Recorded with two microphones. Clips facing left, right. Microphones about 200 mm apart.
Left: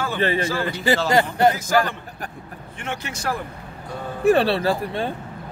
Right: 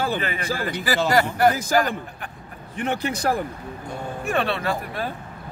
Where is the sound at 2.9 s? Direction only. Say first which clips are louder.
Right 5 dB; 35° right (ahead or behind).